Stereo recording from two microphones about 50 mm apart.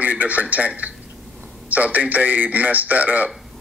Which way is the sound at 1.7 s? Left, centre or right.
Right.